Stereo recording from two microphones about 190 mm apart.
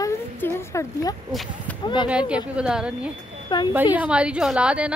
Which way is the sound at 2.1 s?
5° right (ahead or behind).